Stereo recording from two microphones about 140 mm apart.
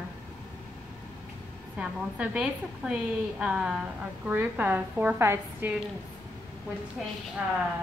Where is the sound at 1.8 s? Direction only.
5° right (ahead or behind).